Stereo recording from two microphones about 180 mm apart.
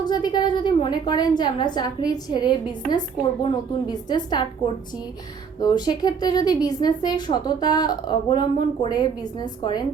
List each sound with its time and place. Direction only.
0.0 s a woman's voice: 25° left (ahead or behind)